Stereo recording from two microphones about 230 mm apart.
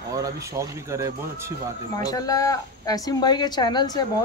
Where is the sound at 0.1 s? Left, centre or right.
Centre.